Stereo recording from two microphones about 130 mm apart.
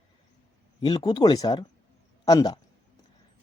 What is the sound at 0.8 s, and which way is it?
A man's voice, 35° left (ahead or behind).